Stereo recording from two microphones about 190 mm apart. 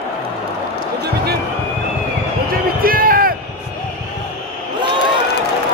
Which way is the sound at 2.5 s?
50° right (ahead or behind).